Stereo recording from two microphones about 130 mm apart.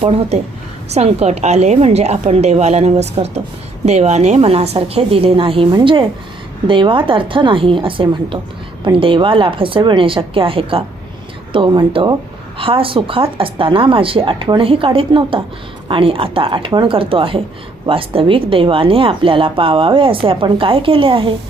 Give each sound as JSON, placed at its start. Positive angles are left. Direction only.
{"t": 0.9, "sound": "a woman's voice", "side_deg": -55}